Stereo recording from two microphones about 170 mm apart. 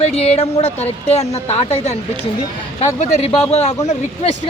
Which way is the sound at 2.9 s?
40° left (ahead or behind).